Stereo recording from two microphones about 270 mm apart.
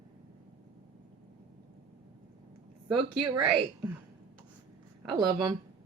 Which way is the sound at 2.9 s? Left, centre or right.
Centre.